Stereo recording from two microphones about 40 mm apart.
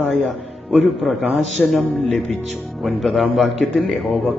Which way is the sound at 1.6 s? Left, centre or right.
Left.